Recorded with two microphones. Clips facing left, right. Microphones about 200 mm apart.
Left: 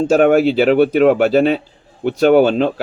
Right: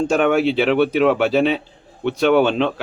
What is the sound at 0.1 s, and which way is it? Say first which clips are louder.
Speech: left 7 dB; 40° left (ahead or behind).